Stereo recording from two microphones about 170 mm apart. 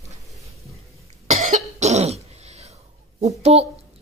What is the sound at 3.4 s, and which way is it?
Speech, 35° right (ahead or behind).